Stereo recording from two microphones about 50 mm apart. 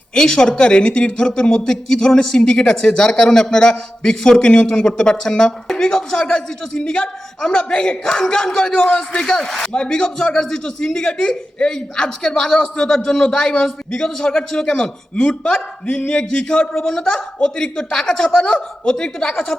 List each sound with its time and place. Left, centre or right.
0.1 s speech: centre